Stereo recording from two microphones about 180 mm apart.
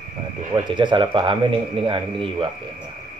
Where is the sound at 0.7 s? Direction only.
25° right (ahead or behind).